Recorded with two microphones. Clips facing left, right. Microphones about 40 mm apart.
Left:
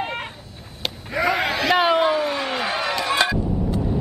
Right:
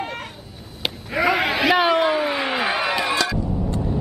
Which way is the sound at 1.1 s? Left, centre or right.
Centre.